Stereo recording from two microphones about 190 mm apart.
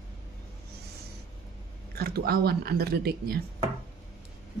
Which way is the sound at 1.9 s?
55° right (ahead or behind).